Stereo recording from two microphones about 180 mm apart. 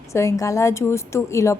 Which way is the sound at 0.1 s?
15° left (ahead or behind).